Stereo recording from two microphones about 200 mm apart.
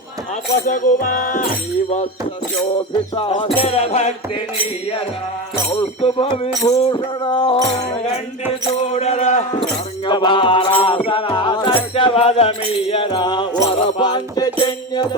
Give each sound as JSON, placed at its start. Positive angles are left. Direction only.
{"t": 0.6, "sound": "music", "side_deg": 40}
{"t": 3.2, "sound": "music", "side_deg": 25}
{"t": 3.6, "sound": "speech", "side_deg": 30}
{"t": 5.7, "sound": "music", "side_deg": 30}
{"t": 8.9, "sound": "speech", "side_deg": 30}
{"t": 10.1, "sound": "music", "side_deg": 25}